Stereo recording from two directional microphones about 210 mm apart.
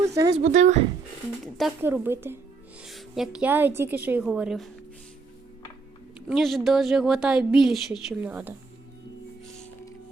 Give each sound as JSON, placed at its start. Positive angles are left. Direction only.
{"t": 0.0, "sound": "a sound", "side_deg": -15}
{"t": 0.5, "sound": "speech", "side_deg": -35}
{"t": 1.8, "sound": "a woman's voice", "side_deg": -10}
{"t": 6.1, "sound": "a woman's voice", "side_deg": 0}